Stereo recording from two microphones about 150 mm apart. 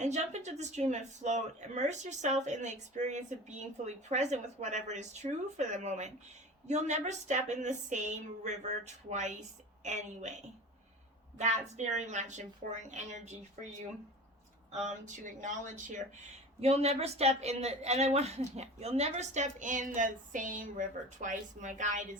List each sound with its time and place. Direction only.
0.0 s speech: 50° right (ahead or behind)
14.7 s speech: 50° right (ahead or behind)